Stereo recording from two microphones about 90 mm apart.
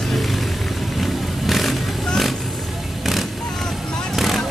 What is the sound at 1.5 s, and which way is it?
Vehicle, centre (ahead or behind).